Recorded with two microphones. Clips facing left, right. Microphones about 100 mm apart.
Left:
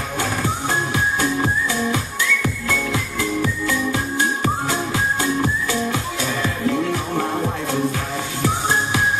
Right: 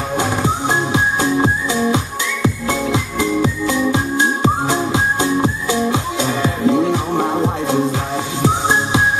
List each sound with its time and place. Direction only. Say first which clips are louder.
0.2 s music: right 4 dB; 20° right (ahead or behind)